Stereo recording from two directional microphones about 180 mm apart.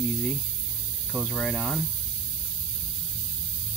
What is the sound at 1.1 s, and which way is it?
Speech, 5° left (ahead or behind).